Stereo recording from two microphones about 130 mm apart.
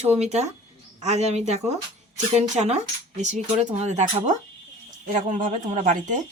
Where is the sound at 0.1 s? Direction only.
60° right (ahead or behind).